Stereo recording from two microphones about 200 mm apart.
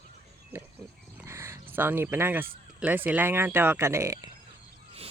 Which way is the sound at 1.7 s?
10° right (ahead or behind).